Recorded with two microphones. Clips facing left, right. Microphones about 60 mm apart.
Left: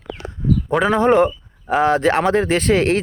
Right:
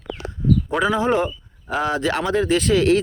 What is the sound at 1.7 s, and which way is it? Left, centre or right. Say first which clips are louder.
Speech: left 6 dB; left.